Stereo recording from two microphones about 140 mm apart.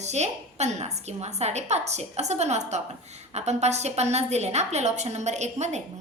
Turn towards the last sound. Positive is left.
turn(degrees=-55)  # may be behind; listen again after turning